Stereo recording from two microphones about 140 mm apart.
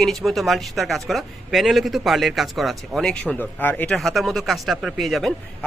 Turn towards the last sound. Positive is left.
turn(degrees=0)  # may be behind; listen again after turning